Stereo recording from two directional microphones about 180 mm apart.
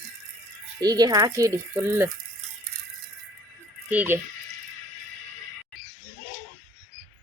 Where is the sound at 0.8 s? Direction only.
20° right (ahead or behind).